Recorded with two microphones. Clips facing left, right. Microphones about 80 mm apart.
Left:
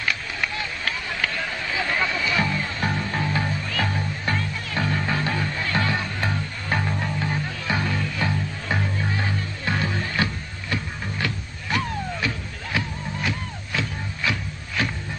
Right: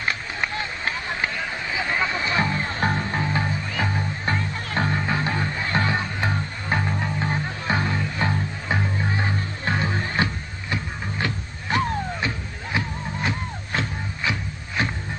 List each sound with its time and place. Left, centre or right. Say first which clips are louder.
0.0 s a sound: even; right
1.3 s a sound: even; centre
2.1 s music: right 1 dB; right
4.6 s music: right 2 dB; right
4.9 s music: right 1 dB; right
6.8 s music: right 1 dB; centre
7.2 s music: right 1 dB; right
8.6 s music: right 1 dB; centre
9.2 s music: right 1 dB; right
14.8 s a sound: right 1 dB; right